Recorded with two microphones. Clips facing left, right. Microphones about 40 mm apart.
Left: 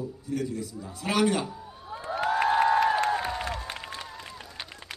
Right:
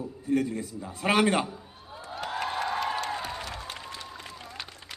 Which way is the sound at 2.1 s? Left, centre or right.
Left.